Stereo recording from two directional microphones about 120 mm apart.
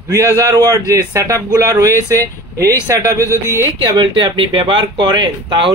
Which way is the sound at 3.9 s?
40° right (ahead or behind).